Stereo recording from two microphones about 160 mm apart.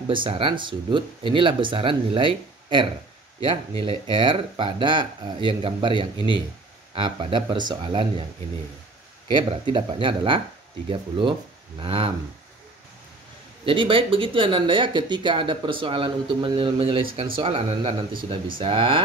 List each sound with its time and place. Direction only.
0.1 s speech: 30° right (ahead or behind)
9.3 s speech: 30° right (ahead or behind)
13.7 s speech: 35° right (ahead or behind)